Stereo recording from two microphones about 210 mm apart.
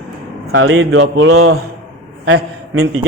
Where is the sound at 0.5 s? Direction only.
70° right (ahead or behind).